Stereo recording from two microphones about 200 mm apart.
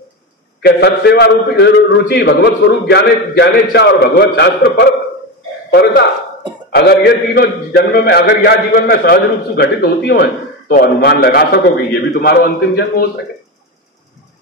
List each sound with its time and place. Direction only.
0.6 s a man's voice: 55° left (ahead or behind)
6.7 s a man's voice: 50° left (ahead or behind)